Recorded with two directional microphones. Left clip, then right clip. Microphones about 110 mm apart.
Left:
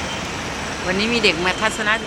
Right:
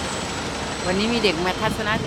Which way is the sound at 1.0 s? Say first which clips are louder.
Left 4 dB; 20° right (ahead or behind).